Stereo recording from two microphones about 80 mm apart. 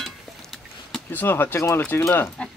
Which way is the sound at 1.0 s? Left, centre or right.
Left.